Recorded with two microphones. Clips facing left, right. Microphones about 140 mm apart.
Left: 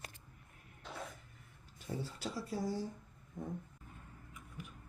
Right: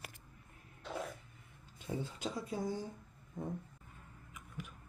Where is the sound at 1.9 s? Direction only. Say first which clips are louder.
Right 2 dB; 20° right (ahead or behind).